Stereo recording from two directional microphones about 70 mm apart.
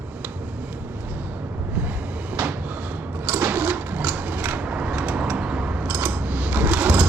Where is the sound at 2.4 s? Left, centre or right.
Right.